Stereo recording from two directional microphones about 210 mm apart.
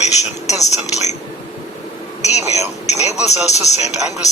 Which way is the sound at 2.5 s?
30° left (ahead or behind).